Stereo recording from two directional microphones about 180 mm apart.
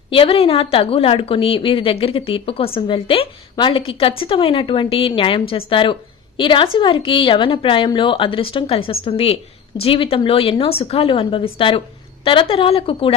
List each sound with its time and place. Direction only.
0.1 s a woman's voice: 30° left (ahead or behind)